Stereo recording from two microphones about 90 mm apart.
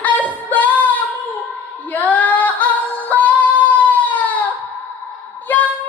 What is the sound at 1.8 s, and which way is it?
Female singing, 20° left (ahead or behind).